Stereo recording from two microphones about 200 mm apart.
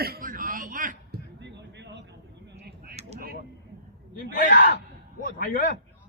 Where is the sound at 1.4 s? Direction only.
60° right (ahead or behind).